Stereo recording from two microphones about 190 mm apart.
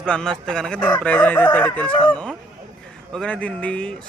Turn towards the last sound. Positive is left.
turn(degrees=5)  # may be behind; listen again after turning